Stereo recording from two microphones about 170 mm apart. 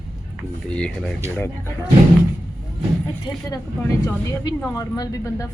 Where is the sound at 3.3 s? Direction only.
20° left (ahead or behind).